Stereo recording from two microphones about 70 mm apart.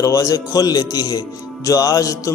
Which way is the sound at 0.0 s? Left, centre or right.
Left.